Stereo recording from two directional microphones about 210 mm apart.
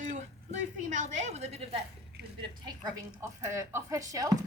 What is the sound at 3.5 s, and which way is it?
Speech, 15° right (ahead or behind).